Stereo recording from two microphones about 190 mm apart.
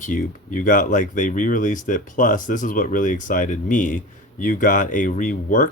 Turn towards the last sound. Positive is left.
turn(degrees=40)  # may be behind; listen again after turning